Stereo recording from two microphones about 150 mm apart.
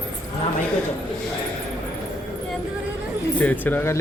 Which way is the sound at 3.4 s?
10° left (ahead or behind).